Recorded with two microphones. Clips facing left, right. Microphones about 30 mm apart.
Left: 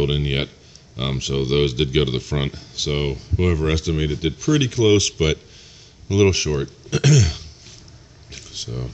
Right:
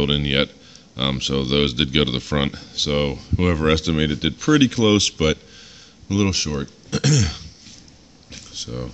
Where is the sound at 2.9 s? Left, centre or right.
Centre.